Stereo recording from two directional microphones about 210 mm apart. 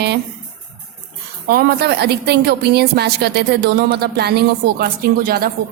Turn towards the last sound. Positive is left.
turn(degrees=-45)  # may be behind; listen again after turning